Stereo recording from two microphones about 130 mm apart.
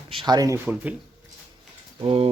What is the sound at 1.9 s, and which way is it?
Speech, 45° right (ahead or behind).